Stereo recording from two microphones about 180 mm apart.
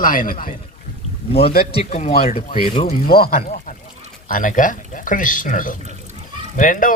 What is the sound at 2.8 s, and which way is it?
Speech, 55° left (ahead or behind).